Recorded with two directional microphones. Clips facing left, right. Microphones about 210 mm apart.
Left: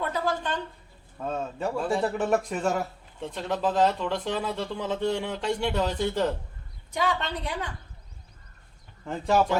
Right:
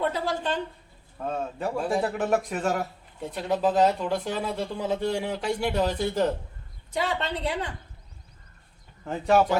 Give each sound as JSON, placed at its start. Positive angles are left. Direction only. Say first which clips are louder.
{"t": 0.0, "sound": "a woman's voice", "louder": "right 1 dB", "side_deg": -30}
{"t": 1.2, "sound": "a man's voice", "louder": "even", "side_deg": -10}
{"t": 6.9, "sound": "a woman's voice", "louder": "even", "side_deg": -25}
{"t": 9.0, "sound": "speech", "louder": "right 1 dB", "side_deg": -5}